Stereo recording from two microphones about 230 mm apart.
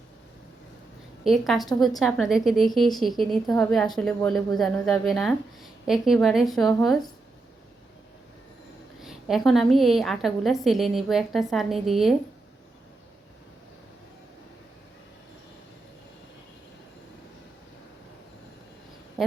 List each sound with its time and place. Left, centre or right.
1.2 s a woman's voice: centre
9.0 s a woman's voice: centre